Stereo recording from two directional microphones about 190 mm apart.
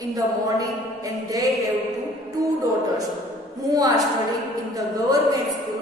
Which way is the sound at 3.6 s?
20° right (ahead or behind).